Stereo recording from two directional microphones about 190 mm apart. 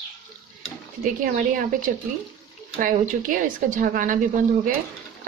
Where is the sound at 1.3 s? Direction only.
45° right (ahead or behind).